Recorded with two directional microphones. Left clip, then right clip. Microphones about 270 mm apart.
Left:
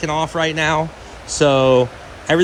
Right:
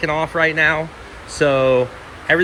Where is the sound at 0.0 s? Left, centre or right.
Centre.